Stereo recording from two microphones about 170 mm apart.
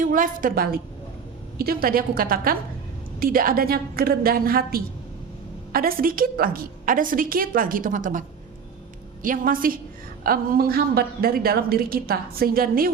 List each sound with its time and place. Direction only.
0.0 s a woman's voice: 50° right (ahead or behind)
9.2 s a woman's voice: 55° right (ahead or behind)